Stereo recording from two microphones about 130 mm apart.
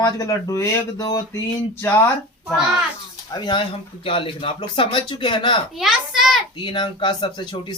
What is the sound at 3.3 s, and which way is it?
Speech, 35° left (ahead or behind).